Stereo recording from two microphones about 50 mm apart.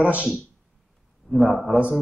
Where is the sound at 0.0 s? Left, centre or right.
Right.